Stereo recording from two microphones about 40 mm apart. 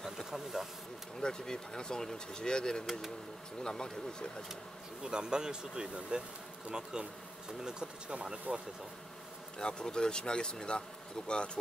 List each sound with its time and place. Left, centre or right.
0.3 s speech: centre
1.2 s speech: centre
5.0 s speech: centre
9.6 s speech: left